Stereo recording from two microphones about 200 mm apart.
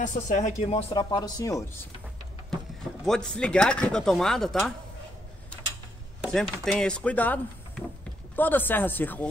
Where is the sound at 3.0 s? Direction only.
5° left (ahead or behind).